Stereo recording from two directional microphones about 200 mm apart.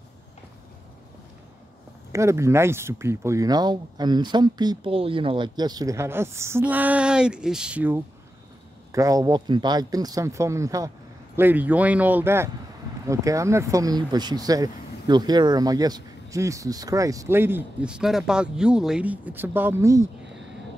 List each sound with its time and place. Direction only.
2.1 s speech: 15° right (ahead or behind)